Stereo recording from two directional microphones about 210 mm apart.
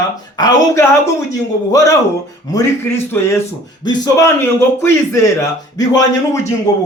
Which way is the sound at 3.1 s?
10° left (ahead or behind).